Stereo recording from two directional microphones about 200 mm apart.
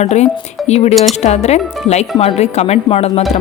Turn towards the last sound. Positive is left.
turn(degrees=30)  # may be behind; listen again after turning